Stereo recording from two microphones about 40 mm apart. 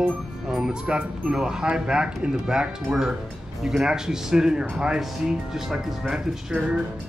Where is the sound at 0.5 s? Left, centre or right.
Centre.